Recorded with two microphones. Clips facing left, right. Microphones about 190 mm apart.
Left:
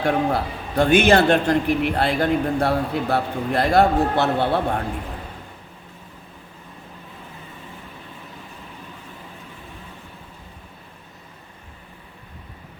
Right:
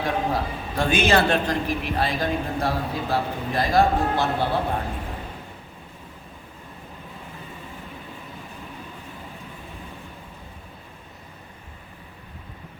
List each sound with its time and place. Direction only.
0.0 s a man's voice: 65° left (ahead or behind)